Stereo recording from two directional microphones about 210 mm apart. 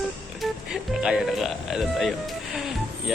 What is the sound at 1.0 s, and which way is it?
A man's voice, 5° right (ahead or behind).